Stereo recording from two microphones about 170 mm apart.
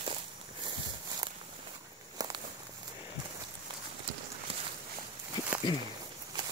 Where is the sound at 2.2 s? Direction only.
25° right (ahead or behind).